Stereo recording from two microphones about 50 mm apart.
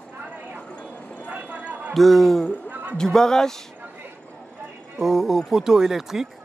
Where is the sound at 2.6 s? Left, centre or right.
Right.